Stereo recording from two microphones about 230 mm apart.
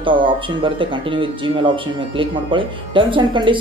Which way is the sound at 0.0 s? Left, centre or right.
Right.